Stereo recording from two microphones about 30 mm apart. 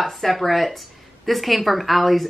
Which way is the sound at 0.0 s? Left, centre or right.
Centre.